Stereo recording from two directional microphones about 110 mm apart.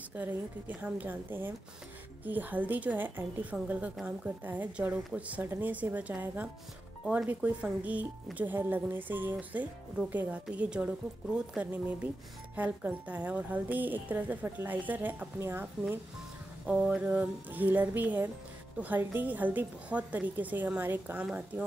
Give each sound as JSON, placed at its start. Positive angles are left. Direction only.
{"t": 0.1, "sound": "a woman's voice", "side_deg": -15}
{"t": 16.6, "sound": "a woman's voice", "side_deg": -10}